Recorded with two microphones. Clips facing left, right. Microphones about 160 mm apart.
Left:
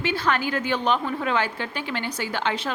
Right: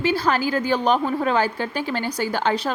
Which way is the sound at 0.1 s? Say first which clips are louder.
Right 1 dB; 35° right (ahead or behind).